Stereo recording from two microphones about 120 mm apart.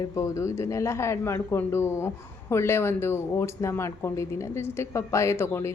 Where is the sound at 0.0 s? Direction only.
25° left (ahead or behind).